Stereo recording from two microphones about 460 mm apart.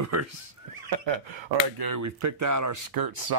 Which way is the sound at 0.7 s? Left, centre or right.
Right.